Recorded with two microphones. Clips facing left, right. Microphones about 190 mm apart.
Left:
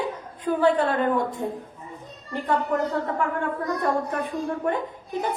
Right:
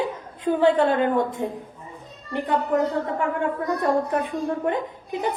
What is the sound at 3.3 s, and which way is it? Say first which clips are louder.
A woman's voice: right 2 dB; 15° right (ahead or behind).